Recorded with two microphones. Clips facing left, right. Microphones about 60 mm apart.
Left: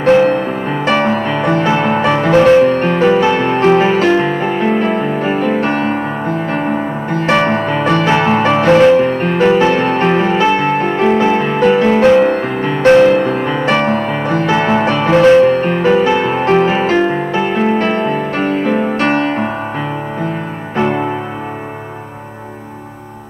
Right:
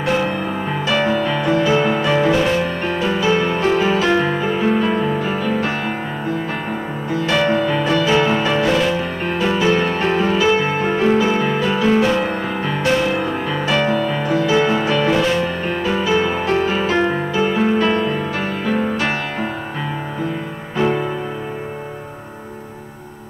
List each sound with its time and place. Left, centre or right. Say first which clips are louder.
0.0 s music: left 9 dB; left
20.7 s music: left 3 dB; left